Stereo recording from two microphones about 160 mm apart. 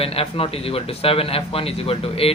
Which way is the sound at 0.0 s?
40° left (ahead or behind).